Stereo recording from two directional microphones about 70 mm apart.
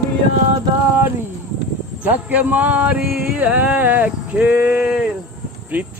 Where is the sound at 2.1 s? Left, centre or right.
Right.